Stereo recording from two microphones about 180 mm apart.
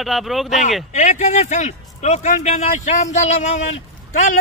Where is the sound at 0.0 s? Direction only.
Centre (ahead or behind).